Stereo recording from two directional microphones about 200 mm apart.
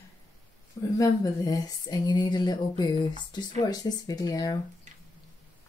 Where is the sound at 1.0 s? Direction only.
20° left (ahead or behind).